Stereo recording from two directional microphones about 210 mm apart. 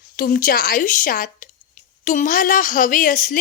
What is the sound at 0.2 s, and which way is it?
A woman's voice, 40° left (ahead or behind).